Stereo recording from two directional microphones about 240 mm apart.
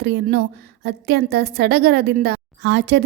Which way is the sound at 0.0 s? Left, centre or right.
Right.